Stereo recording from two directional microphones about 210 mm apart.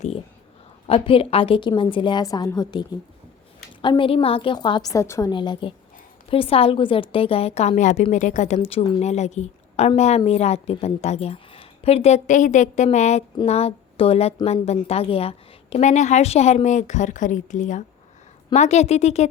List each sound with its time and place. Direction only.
0.9 s a woman's voice: 25° left (ahead or behind)